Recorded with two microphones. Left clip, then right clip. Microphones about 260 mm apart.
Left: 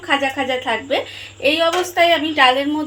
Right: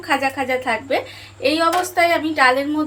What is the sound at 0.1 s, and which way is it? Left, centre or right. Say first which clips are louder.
A woman's voice: left 1 dB; left.